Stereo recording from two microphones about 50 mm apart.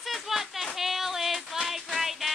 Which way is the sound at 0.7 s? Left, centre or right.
Centre.